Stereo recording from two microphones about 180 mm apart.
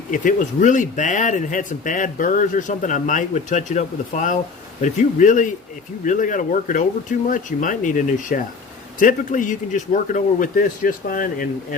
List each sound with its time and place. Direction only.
0.1 s speech: 45° left (ahead or behind)